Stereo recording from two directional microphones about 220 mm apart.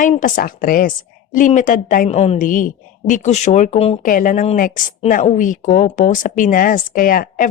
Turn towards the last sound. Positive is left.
turn(degrees=40)  # may be behind; listen again after turning